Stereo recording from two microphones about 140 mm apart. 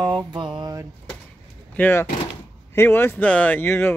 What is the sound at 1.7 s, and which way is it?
Speech, 15° left (ahead or behind).